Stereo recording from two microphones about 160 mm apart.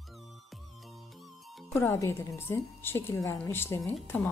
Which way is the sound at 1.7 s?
15° left (ahead or behind).